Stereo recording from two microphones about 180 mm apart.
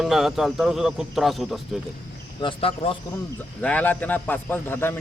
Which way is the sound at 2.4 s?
30° left (ahead or behind).